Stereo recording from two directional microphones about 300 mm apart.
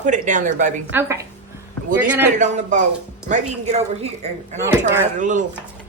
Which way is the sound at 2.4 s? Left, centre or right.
Right.